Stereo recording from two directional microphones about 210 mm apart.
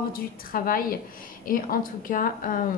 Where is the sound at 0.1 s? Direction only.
45° left (ahead or behind).